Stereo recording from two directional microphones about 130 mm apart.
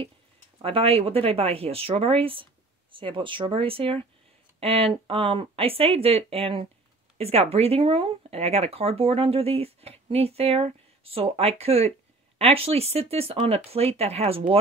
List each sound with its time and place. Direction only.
0.6 s speech: 45° right (ahead or behind)